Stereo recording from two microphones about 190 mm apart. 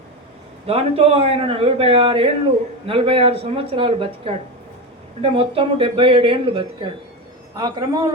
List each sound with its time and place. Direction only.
0.7 s speech: 30° right (ahead or behind)